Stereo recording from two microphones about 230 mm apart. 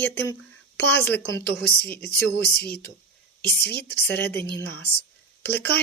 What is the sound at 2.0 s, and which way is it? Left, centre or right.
Speech, left.